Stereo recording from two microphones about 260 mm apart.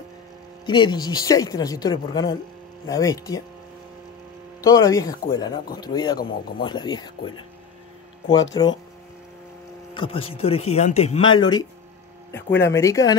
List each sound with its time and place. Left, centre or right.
0.7 s speech: centre
4.6 s speech: centre
8.3 s speech: centre
9.9 s speech: left